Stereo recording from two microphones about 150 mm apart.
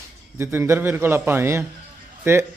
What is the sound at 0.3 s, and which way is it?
A man's voice, 15° right (ahead or behind).